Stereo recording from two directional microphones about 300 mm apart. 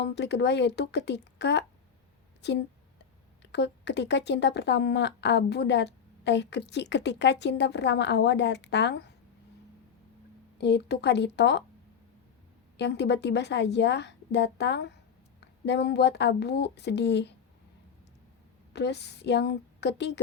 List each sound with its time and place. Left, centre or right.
0.0 s a woman's voice: left
10.6 s speech: left
12.7 s speech: left
18.7 s speech: left